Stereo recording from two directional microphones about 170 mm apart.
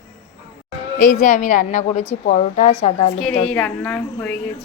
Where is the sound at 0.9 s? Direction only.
50° left (ahead or behind).